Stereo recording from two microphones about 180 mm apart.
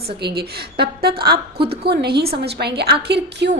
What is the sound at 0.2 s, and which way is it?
A woman's voice, 60° right (ahead or behind).